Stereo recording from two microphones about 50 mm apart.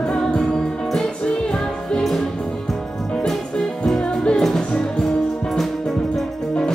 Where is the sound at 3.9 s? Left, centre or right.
Centre.